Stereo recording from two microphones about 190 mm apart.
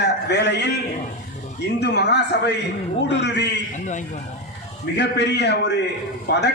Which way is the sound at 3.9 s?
40° left (ahead or behind).